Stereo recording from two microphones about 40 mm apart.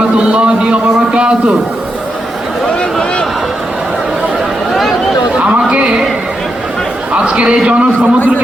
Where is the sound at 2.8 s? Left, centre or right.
Left.